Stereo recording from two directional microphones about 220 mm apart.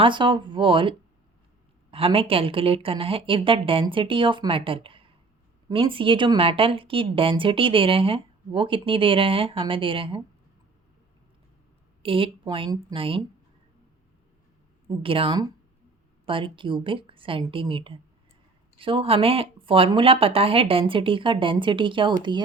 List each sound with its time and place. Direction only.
0.0 s speech: 20° right (ahead or behind)
12.0 s speech: 25° right (ahead or behind)
14.8 s speech: 25° right (ahead or behind)